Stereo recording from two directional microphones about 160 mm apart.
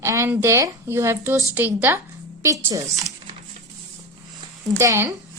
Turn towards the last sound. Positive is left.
turn(degrees=-15)  # may be behind; listen again after turning